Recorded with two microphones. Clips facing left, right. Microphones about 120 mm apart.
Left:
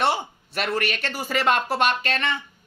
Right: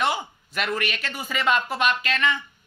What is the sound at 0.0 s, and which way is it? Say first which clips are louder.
Speech: left 2 dB; 35° left (ahead or behind).